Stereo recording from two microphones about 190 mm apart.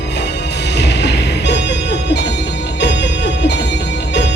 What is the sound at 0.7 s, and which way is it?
Music, 65° left (ahead or behind).